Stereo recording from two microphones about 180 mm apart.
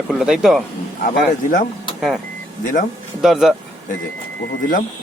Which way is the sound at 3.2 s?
Centre (ahead or behind).